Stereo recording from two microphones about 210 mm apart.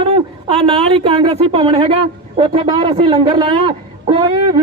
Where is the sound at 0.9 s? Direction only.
25° right (ahead or behind).